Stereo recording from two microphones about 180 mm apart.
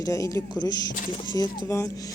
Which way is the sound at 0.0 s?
20° left (ahead or behind).